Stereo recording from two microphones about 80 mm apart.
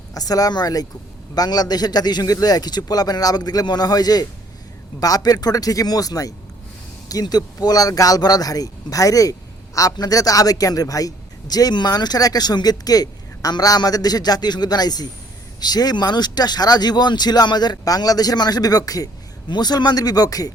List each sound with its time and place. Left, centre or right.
0.1 s a man's voice: left